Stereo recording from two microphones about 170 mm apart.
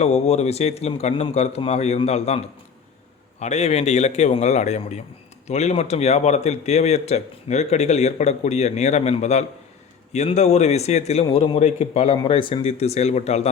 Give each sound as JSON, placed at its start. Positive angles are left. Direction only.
{"t": 0.0, "sound": "a man's voice", "side_deg": 40}
{"t": 3.4, "sound": "a man's voice", "side_deg": 40}